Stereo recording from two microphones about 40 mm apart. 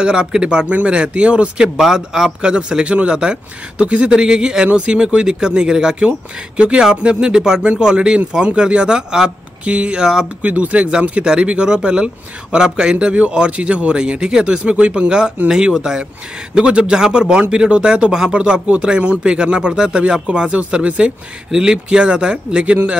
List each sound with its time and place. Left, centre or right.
0.0 s a man's voice: centre
0.7 s a man's voice: right
1.6 s a man's voice: centre
6.0 s a man's voice: right
20.8 s speech: right
21.5 s a man's voice: centre